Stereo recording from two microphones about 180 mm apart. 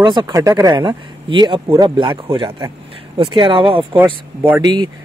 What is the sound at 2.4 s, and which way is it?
Speech, 15° right (ahead or behind).